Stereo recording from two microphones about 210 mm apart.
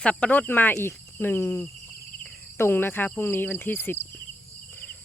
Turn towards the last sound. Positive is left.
turn(degrees=10)  # may be behind; listen again after turning